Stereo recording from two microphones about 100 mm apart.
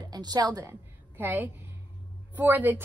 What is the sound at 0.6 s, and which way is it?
A woman's voice, 20° right (ahead or behind).